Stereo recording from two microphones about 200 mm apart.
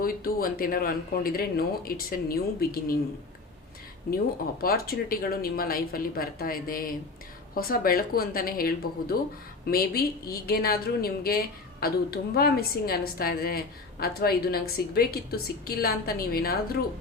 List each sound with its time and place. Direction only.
0.0 s a woman's voice: 45° left (ahead or behind)
4.6 s a woman's voice: 50° left (ahead or behind)